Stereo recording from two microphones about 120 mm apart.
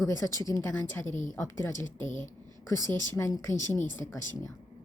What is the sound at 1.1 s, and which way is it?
Speech, 90° left.